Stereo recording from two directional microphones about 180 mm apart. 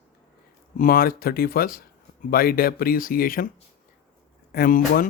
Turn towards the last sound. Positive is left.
turn(degrees=55)  # may be behind; listen again after turning